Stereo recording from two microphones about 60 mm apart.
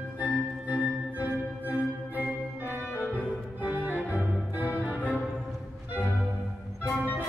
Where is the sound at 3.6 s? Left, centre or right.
Right.